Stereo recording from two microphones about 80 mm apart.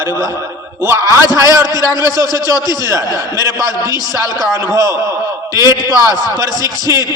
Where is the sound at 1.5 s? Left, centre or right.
Right.